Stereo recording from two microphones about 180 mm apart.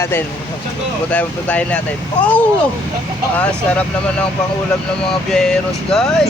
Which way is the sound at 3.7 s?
10° left (ahead or behind).